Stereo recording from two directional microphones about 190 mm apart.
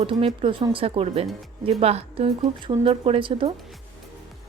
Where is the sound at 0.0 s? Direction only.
30° right (ahead or behind).